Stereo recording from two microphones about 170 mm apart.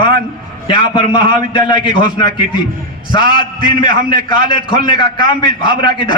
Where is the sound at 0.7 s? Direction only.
30° left (ahead or behind).